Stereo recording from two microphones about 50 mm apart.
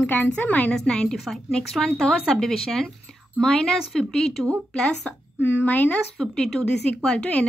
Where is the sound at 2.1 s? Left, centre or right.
Centre.